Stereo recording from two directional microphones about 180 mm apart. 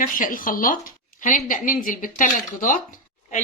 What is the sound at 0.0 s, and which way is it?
A woman's voice, 50° left (ahead or behind).